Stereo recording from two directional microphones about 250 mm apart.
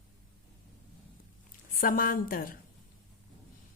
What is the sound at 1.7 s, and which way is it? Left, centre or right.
Speech, left.